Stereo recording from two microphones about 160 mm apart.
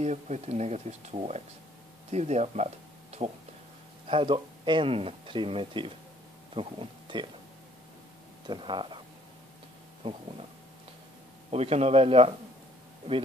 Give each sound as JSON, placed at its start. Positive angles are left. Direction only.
{"t": 0.0, "sound": "speech", "side_deg": -45}
{"t": 4.1, "sound": "speech", "side_deg": -30}
{"t": 8.5, "sound": "speech", "side_deg": -30}
{"t": 11.5, "sound": "speech", "side_deg": -40}